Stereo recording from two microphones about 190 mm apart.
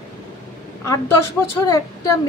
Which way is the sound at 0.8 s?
15° left (ahead or behind).